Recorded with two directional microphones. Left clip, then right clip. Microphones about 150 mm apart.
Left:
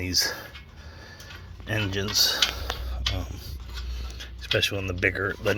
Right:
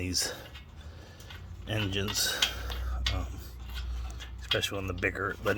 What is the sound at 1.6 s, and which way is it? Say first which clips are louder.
Speech: left 4 dB; centre (ahead or behind).